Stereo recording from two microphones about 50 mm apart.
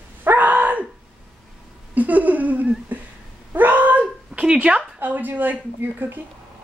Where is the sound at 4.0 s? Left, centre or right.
Right.